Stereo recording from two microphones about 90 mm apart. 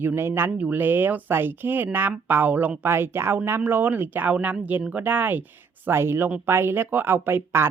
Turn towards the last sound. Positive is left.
turn(degrees=-25)  # may be behind; listen again after turning